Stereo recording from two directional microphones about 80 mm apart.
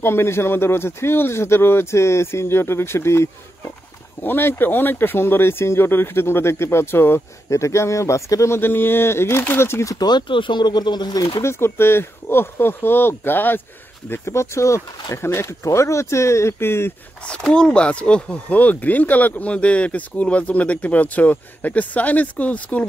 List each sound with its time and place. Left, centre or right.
0.0 s speech: left
8.5 s speech: left
9.9 s speech: left
11.4 s speech: left
17.3 s speech: centre